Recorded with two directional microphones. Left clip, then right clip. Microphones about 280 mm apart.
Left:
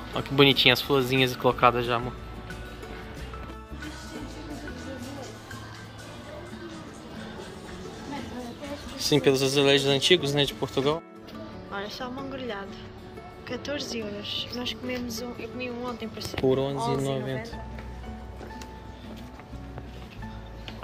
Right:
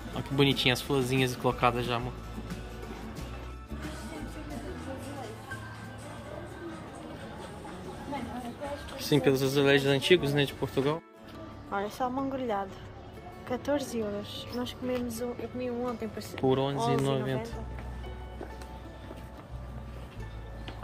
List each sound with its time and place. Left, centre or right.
0.1 s speech: centre
8.9 s speech: centre
11.7 s a woman's voice: right
16.4 s speech: centre